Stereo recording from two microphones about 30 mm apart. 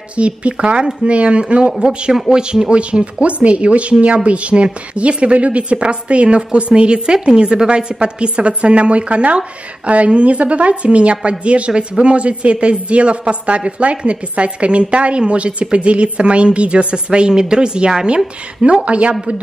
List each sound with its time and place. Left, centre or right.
0.1 s a woman's voice: right
1.9 s a woman's voice: right
2.1 s speech: centre
2.7 s a woman's voice: right